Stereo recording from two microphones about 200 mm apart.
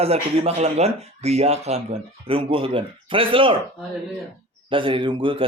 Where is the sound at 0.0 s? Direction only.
30° right (ahead or behind).